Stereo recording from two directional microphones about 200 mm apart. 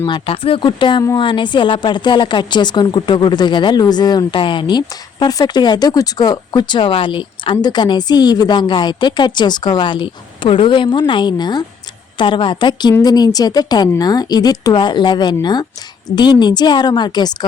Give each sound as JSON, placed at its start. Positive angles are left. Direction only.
{"t": 0.0, "sound": "speech", "side_deg": 25}